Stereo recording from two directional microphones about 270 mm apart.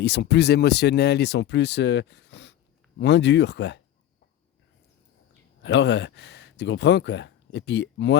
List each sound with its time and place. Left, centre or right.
0.0 s speech: left
5.6 s speech: left